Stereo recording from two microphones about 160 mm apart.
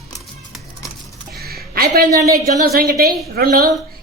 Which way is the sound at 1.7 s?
70° right (ahead or behind).